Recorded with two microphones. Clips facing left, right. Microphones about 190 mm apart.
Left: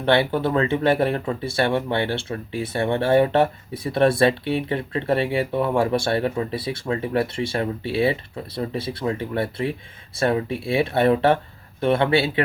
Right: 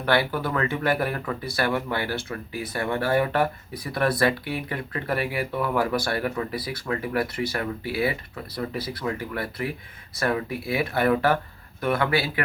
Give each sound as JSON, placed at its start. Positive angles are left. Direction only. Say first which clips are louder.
{"t": 0.0, "sound": "speech", "louder": "left 4 dB", "side_deg": 25}